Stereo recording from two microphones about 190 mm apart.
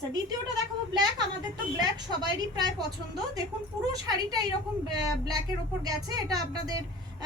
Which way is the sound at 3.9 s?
20° right (ahead or behind).